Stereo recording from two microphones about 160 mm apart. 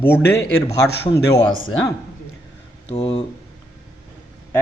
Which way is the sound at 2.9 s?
35° left (ahead or behind).